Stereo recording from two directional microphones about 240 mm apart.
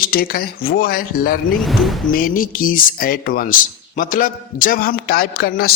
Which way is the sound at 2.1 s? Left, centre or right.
Left.